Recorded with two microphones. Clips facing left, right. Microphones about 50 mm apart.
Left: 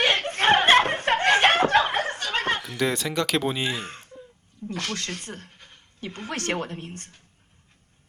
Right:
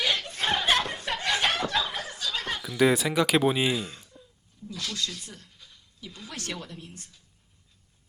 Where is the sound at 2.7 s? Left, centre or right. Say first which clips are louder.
Right 3 dB; centre.